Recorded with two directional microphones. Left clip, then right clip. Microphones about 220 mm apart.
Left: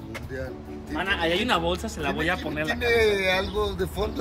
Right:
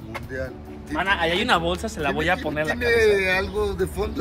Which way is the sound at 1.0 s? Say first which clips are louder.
Right 3 dB; 20° right (ahead or behind).